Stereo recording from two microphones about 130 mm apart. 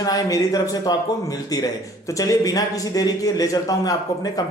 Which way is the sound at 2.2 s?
25° left (ahead or behind).